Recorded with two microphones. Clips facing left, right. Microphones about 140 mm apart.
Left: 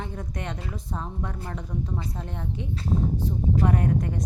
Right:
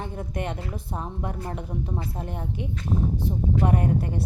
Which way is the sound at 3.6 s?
30° right (ahead or behind).